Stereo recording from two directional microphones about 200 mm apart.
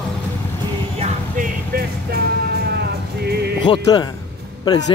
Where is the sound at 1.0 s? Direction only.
40° right (ahead or behind).